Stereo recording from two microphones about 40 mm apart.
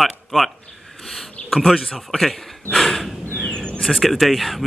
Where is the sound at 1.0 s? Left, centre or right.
Centre.